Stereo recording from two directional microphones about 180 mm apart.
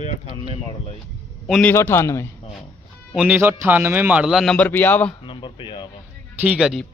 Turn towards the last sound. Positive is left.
turn(degrees=0)  # may be behind; listen again after turning